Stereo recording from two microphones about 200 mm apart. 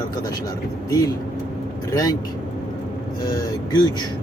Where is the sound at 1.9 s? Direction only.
20° left (ahead or behind).